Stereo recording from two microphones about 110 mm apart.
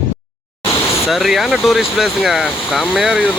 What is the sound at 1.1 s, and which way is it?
Speech, centre (ahead or behind).